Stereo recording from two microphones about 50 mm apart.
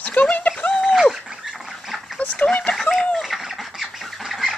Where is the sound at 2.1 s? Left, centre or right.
Left.